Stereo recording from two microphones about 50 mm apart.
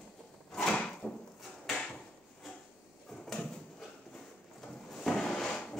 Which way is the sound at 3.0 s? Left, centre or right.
Centre.